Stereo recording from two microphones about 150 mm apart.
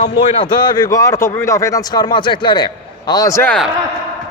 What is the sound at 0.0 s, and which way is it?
Speech, 35° left (ahead or behind).